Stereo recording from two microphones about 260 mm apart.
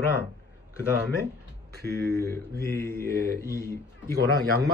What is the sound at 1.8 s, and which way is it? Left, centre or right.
Speech, centre.